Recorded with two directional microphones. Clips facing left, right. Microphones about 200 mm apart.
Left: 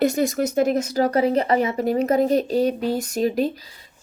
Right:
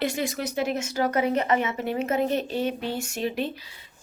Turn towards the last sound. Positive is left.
turn(degrees=40)  # may be behind; listen again after turning